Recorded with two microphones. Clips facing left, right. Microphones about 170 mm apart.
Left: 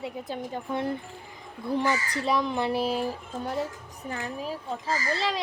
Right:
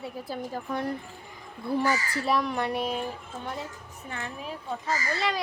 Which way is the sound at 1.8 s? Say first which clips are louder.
Even; 5° right (ahead or behind).